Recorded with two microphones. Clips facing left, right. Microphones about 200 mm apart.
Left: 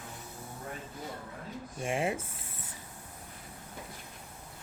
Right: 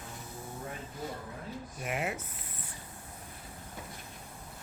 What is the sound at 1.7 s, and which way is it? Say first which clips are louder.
Speech: left 4 dB; 30° left (ahead or behind).